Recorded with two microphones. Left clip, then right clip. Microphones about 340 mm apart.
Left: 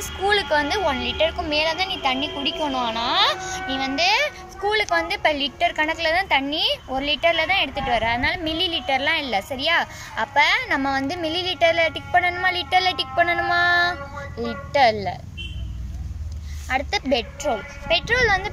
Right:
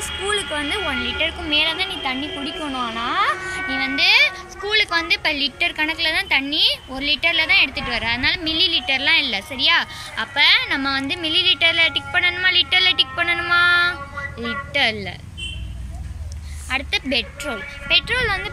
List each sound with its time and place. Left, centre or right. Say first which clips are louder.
0.3 s a woman's voice: left 3 dB; left
16.6 s a woman's voice: even; left